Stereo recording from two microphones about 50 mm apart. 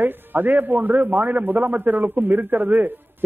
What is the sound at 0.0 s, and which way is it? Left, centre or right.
A man's voice, right.